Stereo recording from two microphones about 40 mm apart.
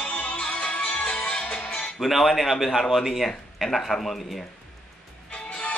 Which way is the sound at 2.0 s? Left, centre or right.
Centre.